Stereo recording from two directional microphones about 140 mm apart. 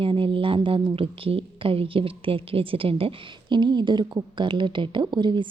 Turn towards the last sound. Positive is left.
turn(degrees=-35)  # may be behind; listen again after turning